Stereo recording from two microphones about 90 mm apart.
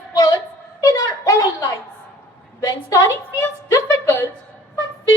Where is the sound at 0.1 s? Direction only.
45° left (ahead or behind).